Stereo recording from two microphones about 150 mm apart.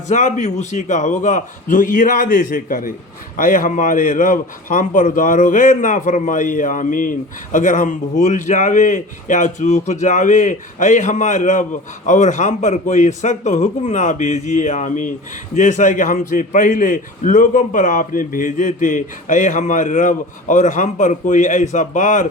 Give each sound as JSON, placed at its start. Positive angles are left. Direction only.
{"t": 0.1, "sound": "a man's voice", "side_deg": 55}